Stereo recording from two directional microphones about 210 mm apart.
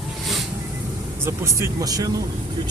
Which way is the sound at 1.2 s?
15° right (ahead or behind).